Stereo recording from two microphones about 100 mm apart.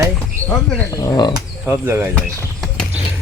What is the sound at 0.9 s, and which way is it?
Speech, 35° left (ahead or behind).